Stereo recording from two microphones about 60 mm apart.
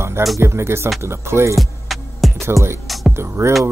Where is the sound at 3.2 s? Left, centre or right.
Right.